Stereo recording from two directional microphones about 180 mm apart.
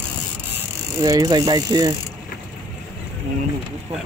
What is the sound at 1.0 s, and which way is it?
Speech, 20° right (ahead or behind).